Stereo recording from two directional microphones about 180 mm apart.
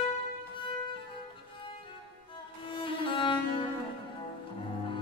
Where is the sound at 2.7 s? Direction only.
30° left (ahead or behind).